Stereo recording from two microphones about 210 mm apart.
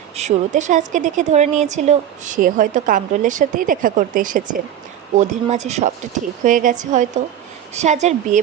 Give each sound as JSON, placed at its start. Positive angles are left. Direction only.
{"t": 0.2, "sound": "a woman's voice", "side_deg": -35}